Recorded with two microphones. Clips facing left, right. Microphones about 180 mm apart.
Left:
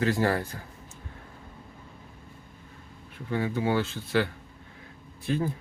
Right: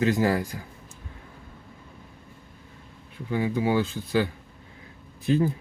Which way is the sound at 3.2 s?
15° right (ahead or behind).